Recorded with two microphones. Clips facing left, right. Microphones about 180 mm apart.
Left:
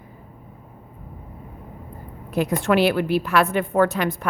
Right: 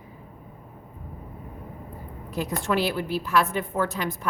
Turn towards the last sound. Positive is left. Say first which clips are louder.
# left 7 dB
turn(degrees=65)  # may be behind; listen again after turning